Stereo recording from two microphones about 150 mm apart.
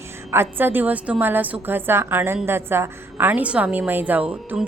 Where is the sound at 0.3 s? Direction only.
15° right (ahead or behind).